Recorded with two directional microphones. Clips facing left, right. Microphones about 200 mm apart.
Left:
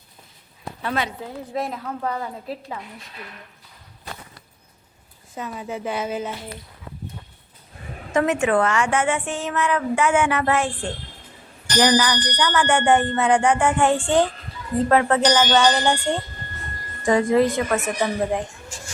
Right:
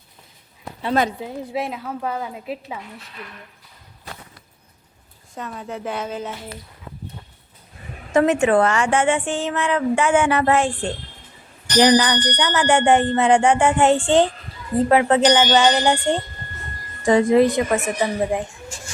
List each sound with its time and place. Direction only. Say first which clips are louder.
1.5 s speech: even; centre (ahead or behind)
5.3 s speech: left 1 dB; 5° left (ahead or behind)
8.1 s a woman's voice: right 3 dB; 30° right (ahead or behind)
11.8 s a woman's voice: right 3 dB; 25° right (ahead or behind); by 18.4 s 5° right (ahead or behind)